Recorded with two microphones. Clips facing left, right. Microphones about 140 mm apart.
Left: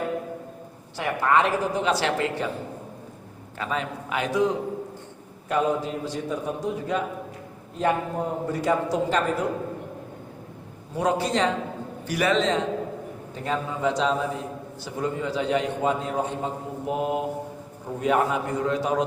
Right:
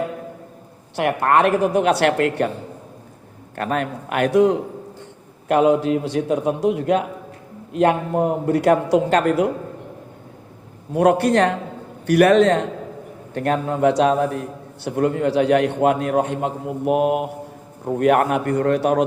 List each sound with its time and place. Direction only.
0.9 s a woman's voice: 60° right (ahead or behind)
3.6 s a woman's voice: 60° right (ahead or behind)
5.5 s a man's voice: 75° right (ahead or behind)
10.9 s a woman's voice: 60° right (ahead or behind)